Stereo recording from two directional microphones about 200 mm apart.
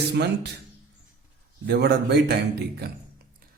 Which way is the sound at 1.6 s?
55° right (ahead or behind).